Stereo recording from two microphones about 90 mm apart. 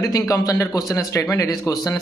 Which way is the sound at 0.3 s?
35° left (ahead or behind).